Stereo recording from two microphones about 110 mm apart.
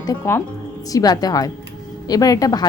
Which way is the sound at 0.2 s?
30° left (ahead or behind).